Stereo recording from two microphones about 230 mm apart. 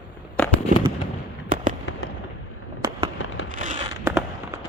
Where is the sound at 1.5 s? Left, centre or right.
Right.